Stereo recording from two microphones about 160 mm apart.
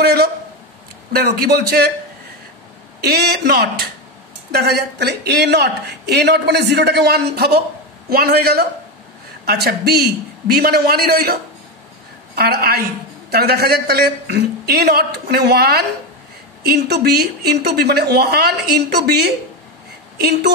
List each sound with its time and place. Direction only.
0.0 s a woman's voice: 80° right
3.0 s a woman's voice: 85° right
8.1 s a man's voice: 75° right (ahead or behind)
12.4 s a woman's voice: 80° right